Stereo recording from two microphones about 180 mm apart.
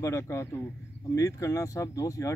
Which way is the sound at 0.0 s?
15° left (ahead or behind).